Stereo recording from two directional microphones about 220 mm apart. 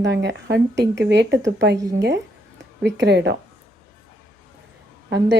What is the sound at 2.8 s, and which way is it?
Speech, 55° right (ahead or behind).